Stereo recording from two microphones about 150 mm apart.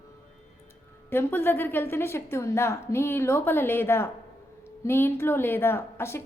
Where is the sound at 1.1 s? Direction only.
15° left (ahead or behind).